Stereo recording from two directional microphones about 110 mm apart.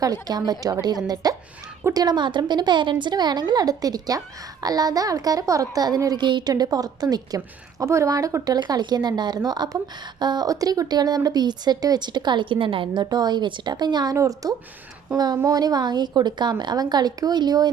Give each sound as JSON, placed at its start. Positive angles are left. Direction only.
{"t": 0.0, "sound": "a woman's voice", "side_deg": -35}